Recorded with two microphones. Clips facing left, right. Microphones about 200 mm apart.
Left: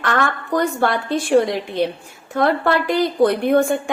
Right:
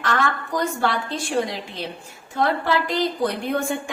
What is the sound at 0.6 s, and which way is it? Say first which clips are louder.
A woman's voice: left 5 dB; 60° left (ahead or behind).